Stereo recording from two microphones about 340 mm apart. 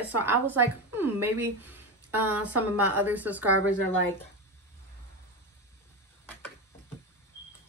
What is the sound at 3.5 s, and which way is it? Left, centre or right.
Speech, right.